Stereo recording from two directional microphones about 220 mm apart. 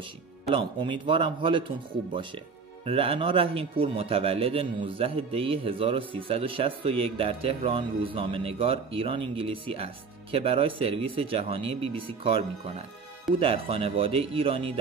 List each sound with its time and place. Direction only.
0.5 s speech: 20° right (ahead or behind)